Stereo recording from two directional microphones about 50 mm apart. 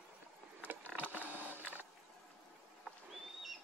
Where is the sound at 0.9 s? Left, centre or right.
Right.